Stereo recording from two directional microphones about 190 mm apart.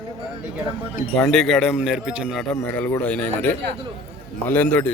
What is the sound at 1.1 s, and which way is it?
Speech, 5° left (ahead or behind).